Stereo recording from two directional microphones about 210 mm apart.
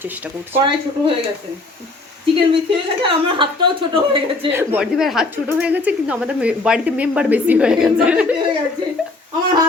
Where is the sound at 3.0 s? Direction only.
25° right (ahead or behind).